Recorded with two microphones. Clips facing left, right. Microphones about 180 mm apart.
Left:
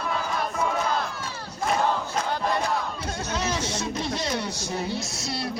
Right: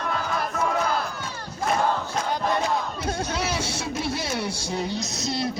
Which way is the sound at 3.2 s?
10° right (ahead or behind).